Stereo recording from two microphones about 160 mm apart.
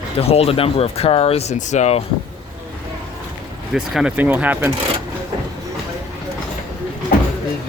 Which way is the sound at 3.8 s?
5° right (ahead or behind).